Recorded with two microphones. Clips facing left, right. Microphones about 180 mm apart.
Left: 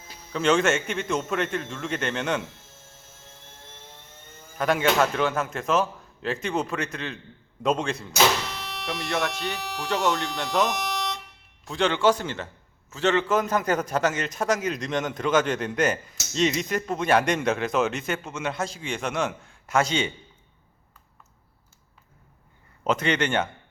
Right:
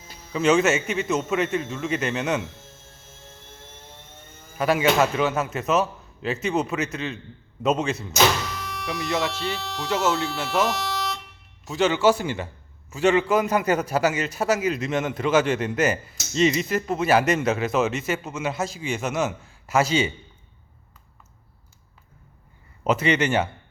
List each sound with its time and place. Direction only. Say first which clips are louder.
0.3 s a man's voice: right 2 dB; 5° right (ahead or behind)
4.5 s a man's voice: right 2 dB; 5° right (ahead or behind)
8.5 s music: right 2 dB; 25° left (ahead or behind)
8.9 s a man's voice: right 2 dB; 5° right (ahead or behind)
9.6 s speech: right 1 dB; 15° left (ahead or behind)
9.9 s a man's voice: right 2 dB; 5° right (ahead or behind)
10.7 s music: right 2 dB; 20° left (ahead or behind)
11.6 s a man's voice: right 2 dB; 5° right (ahead or behind)
22.8 s a man's voice: right 3 dB; 5° right (ahead or behind)